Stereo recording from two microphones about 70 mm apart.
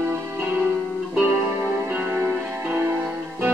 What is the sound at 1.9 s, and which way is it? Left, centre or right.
Music, right.